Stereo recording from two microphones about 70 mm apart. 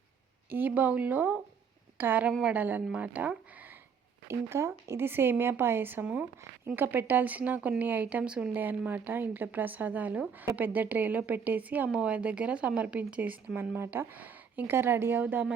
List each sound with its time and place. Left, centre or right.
0.5 s speech: right
4.3 s a woman's voice: right
8.2 s speech: centre
8.5 s speech: right